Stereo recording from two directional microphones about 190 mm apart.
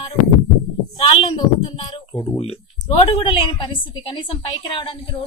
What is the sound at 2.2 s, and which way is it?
A woman's voice, 30° left (ahead or behind).